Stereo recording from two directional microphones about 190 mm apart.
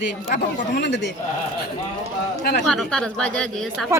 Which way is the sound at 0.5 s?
60° left (ahead or behind).